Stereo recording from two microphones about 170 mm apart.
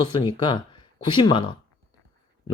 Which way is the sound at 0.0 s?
25° left (ahead or behind).